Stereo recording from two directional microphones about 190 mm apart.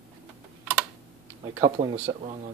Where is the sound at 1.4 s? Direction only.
25° right (ahead or behind).